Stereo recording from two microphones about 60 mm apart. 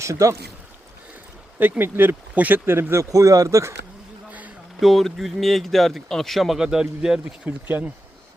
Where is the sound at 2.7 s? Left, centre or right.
Right.